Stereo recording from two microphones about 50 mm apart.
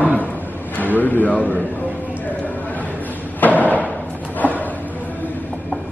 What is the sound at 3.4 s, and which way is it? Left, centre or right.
Thump, left.